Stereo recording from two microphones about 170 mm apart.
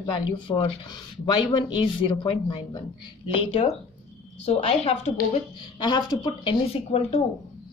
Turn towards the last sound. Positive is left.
turn(degrees=35)  # may be behind; listen again after turning